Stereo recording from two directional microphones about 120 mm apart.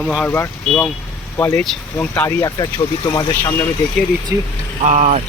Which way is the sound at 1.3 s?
25° left (ahead or behind).